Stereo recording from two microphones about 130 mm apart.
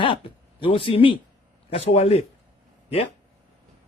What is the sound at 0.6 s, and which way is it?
Speech, 45° left (ahead or behind).